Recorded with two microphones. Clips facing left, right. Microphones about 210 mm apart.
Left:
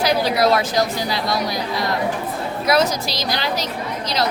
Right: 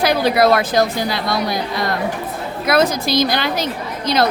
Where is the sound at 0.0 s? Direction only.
55° right (ahead or behind).